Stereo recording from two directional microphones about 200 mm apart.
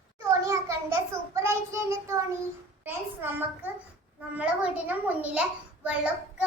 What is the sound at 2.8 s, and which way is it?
A child's voice, 10° right (ahead or behind).